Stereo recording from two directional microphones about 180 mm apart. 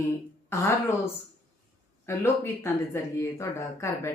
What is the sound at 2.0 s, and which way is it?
Speech, 15° left (ahead or behind).